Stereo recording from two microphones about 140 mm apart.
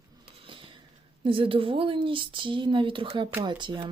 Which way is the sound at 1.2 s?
40° right (ahead or behind).